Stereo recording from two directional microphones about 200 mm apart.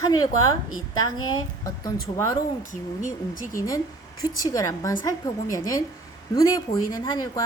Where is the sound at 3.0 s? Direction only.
40° left (ahead or behind).